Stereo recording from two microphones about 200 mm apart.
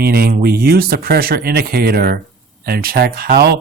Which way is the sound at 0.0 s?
50° right (ahead or behind).